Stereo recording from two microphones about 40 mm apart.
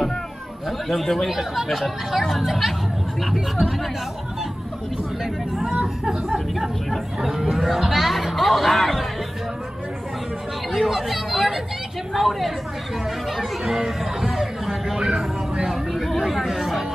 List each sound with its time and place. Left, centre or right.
0.7 s speech: centre
5.2 s speech: centre
10.7 s speech: centre
13.8 s speech: centre
15.0 s a man's voice: centre
15.7 s chatter: centre